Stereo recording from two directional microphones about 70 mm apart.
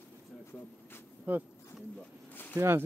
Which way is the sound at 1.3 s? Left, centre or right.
Right.